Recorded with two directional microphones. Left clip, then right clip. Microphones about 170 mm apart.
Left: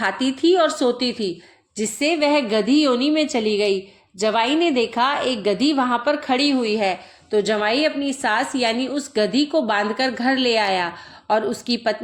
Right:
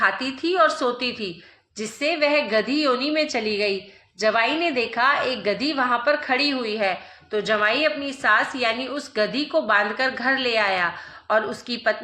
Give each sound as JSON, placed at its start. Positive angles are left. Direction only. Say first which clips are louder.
{"t": 0.0, "sound": "a woman's voice", "louder": "left 2 dB", "side_deg": 45}